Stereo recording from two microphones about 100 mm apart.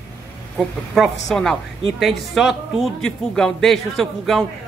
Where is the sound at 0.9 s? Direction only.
Centre (ahead or behind).